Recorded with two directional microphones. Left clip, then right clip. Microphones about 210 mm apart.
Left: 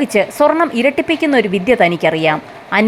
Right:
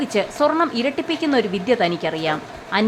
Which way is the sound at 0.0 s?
20° left (ahead or behind).